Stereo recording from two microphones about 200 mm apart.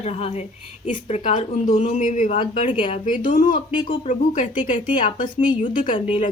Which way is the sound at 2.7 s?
25° left (ahead or behind).